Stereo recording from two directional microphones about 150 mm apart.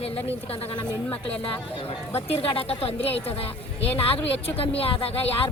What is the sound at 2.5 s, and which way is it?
Speech, 40° left (ahead or behind).